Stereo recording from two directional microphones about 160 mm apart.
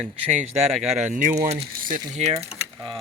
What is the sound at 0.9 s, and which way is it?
Speech, 50° right (ahead or behind).